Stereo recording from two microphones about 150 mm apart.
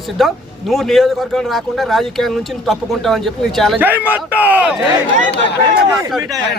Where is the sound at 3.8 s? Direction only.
10° right (ahead or behind).